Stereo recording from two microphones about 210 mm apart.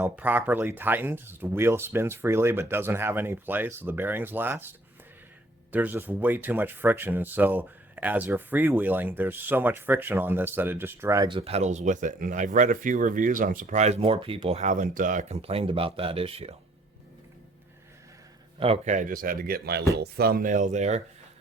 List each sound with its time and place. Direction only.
0.0 s speech: 10° right (ahead or behind)
5.7 s speech: 10° right (ahead or behind); by 16.6 s 30° right (ahead or behind)
18.6 s speech: 30° right (ahead or behind)